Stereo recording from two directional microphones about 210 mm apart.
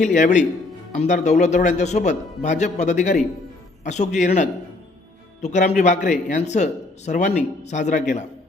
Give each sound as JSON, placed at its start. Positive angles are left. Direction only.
{"t": 0.0, "sound": "speech", "side_deg": 35}